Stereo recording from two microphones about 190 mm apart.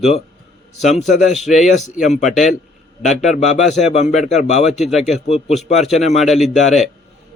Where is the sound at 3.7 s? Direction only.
35° left (ahead or behind).